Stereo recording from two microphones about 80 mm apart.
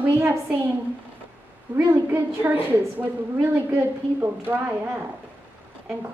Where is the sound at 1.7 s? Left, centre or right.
Right.